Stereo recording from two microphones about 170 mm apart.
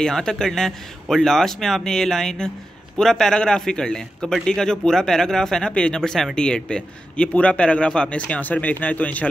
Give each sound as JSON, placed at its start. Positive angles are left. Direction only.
{"t": 0.0, "sound": "a man's voice", "side_deg": 5}